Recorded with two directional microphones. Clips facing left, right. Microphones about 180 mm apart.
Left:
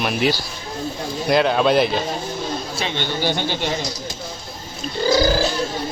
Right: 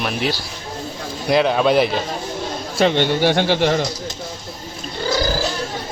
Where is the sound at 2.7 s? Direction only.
75° right (ahead or behind).